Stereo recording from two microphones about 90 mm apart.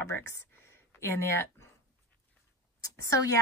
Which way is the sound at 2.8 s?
35° left (ahead or behind).